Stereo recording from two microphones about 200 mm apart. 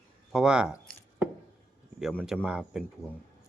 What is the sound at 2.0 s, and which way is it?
Speech, centre (ahead or behind).